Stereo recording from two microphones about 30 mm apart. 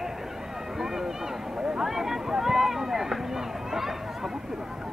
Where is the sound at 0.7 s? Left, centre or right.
Centre.